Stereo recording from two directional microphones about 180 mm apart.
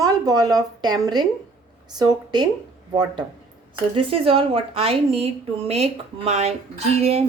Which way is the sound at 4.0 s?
30° right (ahead or behind).